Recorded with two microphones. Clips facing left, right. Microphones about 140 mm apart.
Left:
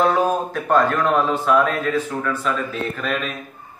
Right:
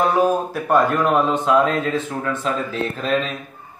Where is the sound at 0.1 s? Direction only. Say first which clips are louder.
Right 2 dB; 10° right (ahead or behind); by 3.3 s 30° right (ahead or behind).